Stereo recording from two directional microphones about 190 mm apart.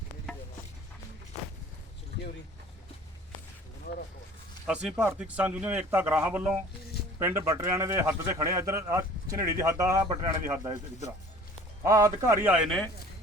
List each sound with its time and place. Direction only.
4.6 s a man's voice: 5° right (ahead or behind)
12.6 s speech: 5° left (ahead or behind)